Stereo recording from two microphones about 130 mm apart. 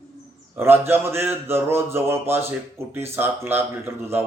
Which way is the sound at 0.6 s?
15° right (ahead or behind).